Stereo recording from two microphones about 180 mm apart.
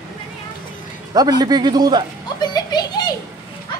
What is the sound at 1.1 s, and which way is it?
Speech, 20° right (ahead or behind).